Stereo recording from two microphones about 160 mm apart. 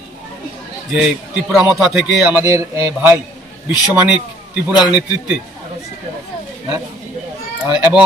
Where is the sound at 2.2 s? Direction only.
20° right (ahead or behind).